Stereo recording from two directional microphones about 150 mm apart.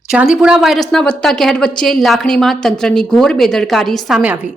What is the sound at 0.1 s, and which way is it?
A woman's voice, 5° right (ahead or behind).